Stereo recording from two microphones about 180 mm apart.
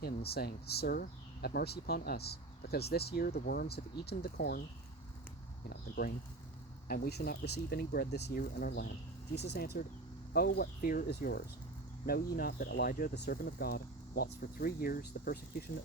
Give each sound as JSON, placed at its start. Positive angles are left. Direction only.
{"t": 0.0, "sound": "speech", "side_deg": 60}
{"t": 6.8, "sound": "speech", "side_deg": 55}